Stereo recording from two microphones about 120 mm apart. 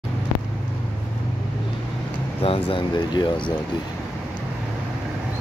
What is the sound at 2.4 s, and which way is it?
Speech, 50° left (ahead or behind).